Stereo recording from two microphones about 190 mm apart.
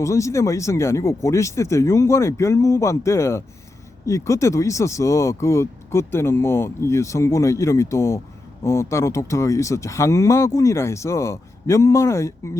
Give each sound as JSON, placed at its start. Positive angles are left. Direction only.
{"t": 0.0, "sound": "speech", "side_deg": 15}